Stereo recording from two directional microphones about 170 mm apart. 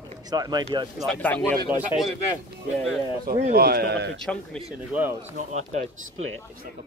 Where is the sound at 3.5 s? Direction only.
65° right (ahead or behind).